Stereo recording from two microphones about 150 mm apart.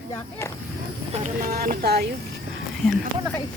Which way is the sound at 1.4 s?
80° right.